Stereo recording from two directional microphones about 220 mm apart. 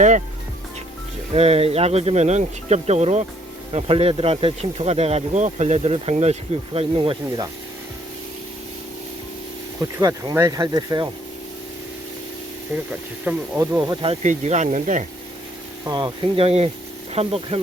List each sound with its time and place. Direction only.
1.3 s speech: 25° right (ahead or behind)
10.0 s speech: 15° right (ahead or behind)
12.7 s speech: 10° right (ahead or behind); by 15.0 s 35° right (ahead or behind)
15.9 s speech: 20° right (ahead or behind)